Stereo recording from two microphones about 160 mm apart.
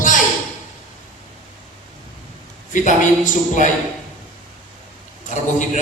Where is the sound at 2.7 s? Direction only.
50° left (ahead or behind).